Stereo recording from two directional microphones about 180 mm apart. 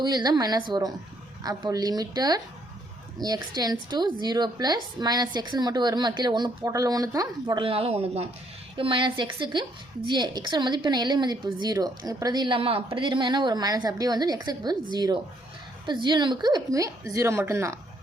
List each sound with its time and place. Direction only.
0.0 s a woman's voice: 25° right (ahead or behind)